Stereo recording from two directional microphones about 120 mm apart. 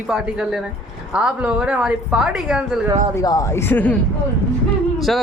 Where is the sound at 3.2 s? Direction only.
30° left (ahead or behind).